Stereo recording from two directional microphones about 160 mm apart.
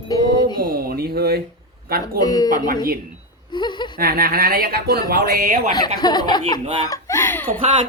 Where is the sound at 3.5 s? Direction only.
30° left (ahead or behind).